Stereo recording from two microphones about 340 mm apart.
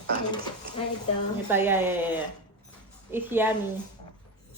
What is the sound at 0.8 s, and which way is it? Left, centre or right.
Speech, centre.